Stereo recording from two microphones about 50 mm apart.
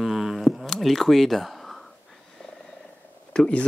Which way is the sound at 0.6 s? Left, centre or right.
Centre.